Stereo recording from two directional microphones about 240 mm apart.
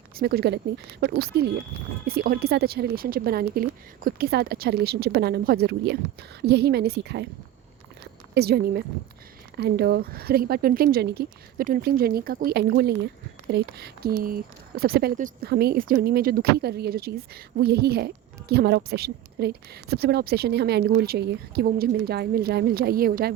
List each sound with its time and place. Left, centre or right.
0.2 s a woman's voice: right
8.4 s a woman's voice: right